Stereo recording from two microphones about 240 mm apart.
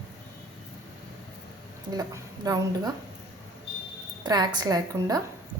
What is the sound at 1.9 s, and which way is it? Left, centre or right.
A woman's voice, centre.